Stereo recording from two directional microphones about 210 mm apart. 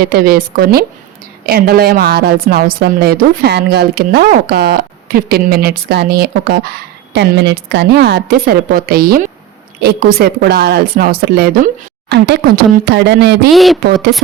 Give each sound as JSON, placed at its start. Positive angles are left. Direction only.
{"t": 0.0, "sound": "a woman's voice", "side_deg": -45}
{"t": 13.5, "sound": "a woman's voice", "side_deg": 0}